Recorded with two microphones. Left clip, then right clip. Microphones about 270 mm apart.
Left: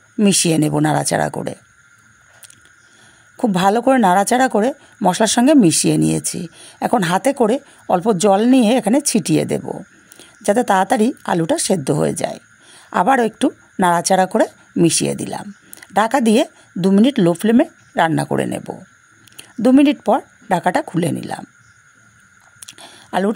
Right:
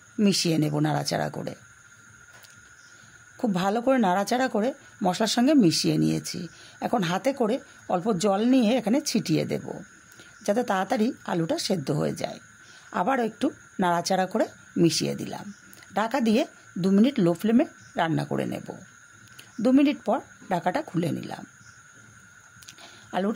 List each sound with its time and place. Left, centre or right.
0.2 s speech: left
3.3 s speech: left
22.7 s a sound: left